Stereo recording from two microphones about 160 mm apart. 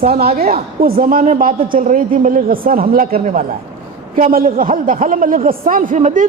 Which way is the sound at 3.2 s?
45° right (ahead or behind).